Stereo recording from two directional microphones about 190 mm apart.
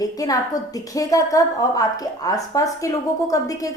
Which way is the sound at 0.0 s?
20° left (ahead or behind).